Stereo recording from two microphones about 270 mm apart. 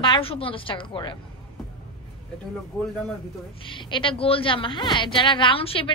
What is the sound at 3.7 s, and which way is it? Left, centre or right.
A woman's voice, centre.